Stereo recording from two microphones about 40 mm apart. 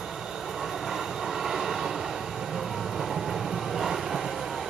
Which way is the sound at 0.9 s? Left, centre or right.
Centre.